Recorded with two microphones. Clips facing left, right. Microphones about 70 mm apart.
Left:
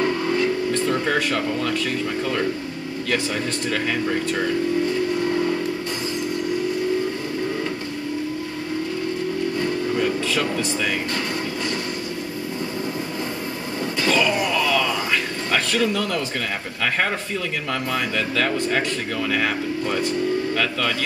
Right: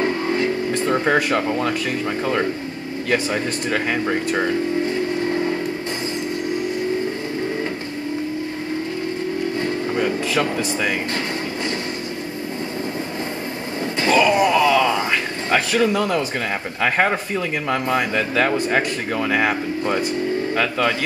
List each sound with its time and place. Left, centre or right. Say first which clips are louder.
0.0 s vehicle: right 1 dB; right
0.8 s speech: right 6 dB; right
3.7 s speech: right 2 dB; centre
9.6 s a sound: even; right
14.0 s a sound: right 5 dB; right
15.5 s speech: right 4 dB; centre
17.6 s speech: right 6 dB; centre